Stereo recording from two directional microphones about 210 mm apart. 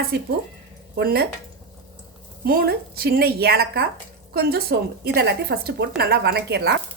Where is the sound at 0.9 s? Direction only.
50° right (ahead or behind).